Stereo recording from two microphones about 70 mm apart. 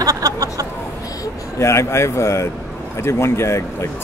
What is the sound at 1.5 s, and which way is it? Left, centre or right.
Speech, left.